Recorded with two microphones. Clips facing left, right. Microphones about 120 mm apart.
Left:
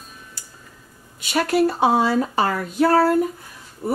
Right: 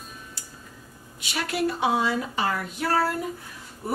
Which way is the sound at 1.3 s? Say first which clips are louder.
Left 8 dB; 40° left (ahead or behind).